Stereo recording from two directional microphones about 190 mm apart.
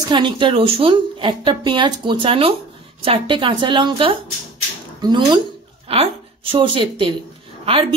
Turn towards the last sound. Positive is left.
turn(degrees=-30)  # may be behind; listen again after turning